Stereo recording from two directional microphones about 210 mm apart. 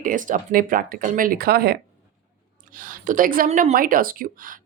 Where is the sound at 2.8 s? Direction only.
40° right (ahead or behind).